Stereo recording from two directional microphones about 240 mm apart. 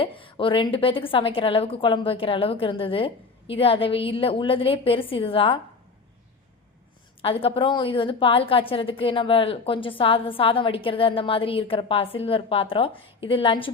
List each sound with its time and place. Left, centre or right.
0.0 s a woman's voice: left
7.2 s a woman's voice: left